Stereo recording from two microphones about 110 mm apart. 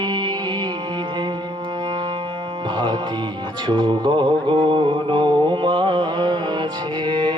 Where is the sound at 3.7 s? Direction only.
45° right (ahead or behind).